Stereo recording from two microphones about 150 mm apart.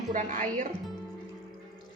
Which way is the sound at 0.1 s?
60° right (ahead or behind).